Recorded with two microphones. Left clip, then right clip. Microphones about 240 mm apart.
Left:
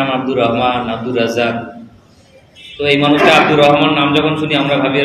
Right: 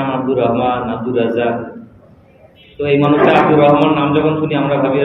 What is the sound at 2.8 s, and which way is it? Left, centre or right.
A man's voice, centre.